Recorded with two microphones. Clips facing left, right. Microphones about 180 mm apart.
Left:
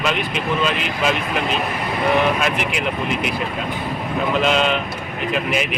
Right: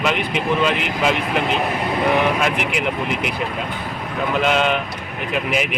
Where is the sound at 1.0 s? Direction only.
15° right (ahead or behind).